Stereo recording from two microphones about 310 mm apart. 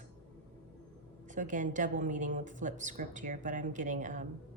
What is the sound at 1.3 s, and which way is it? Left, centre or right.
A woman's voice, right.